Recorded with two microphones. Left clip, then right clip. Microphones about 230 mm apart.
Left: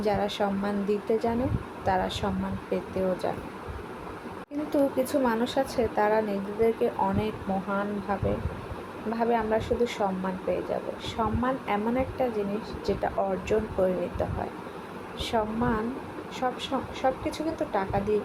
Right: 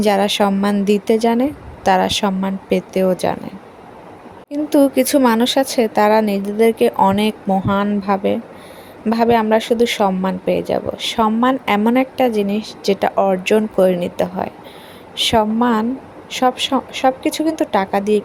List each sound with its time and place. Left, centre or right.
0.0 s speech: right
4.7 s speech: right